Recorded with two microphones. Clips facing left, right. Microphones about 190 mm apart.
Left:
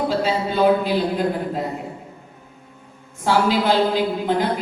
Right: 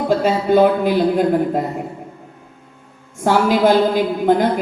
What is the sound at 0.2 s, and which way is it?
A woman's voice, 50° right (ahead or behind).